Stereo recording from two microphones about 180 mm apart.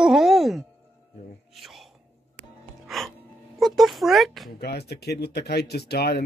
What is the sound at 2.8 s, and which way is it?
Music, centre (ahead or behind).